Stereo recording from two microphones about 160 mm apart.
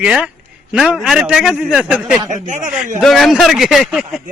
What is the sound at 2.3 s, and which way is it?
Speech, 50° right (ahead or behind).